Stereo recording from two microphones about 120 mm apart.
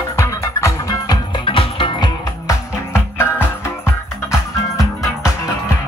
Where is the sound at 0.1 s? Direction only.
25° left (ahead or behind); by 2.0 s 45° left (ahead or behind).